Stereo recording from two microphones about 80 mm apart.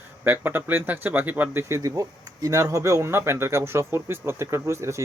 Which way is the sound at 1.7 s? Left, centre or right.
Right.